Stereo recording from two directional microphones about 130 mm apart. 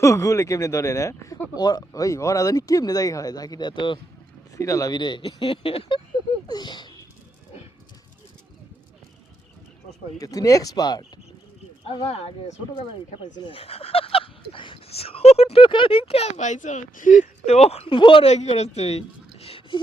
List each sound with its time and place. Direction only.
0.0 s speech: 25° left (ahead or behind)
4.5 s speech: 25° left (ahead or behind)
10.2 s speech: 25° left (ahead or behind)
11.9 s speech: 50° left (ahead or behind); by 17.2 s 85° left
17.4 s speech: 55° left (ahead or behind)
18.3 s a woman's voice: 55° left (ahead or behind)